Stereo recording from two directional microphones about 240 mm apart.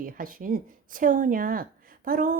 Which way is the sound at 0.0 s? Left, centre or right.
Right.